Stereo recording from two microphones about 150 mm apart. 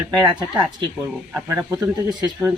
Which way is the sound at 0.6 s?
20° right (ahead or behind).